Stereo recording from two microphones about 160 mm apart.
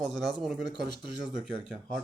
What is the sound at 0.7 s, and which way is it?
Speech, 25° left (ahead or behind).